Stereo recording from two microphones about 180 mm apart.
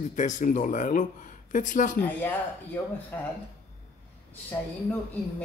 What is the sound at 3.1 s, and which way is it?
Speech, 10° left (ahead or behind).